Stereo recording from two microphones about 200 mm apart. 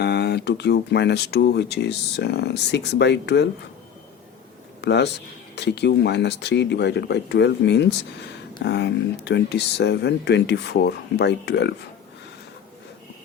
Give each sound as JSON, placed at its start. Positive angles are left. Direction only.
{"t": 0.0, "sound": "speech", "side_deg": 55}
{"t": 4.8, "sound": "speech", "side_deg": 60}